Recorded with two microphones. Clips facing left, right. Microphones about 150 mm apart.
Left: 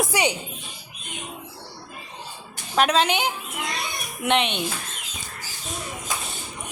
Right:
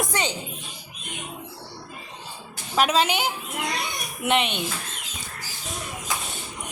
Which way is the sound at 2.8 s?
5° right (ahead or behind).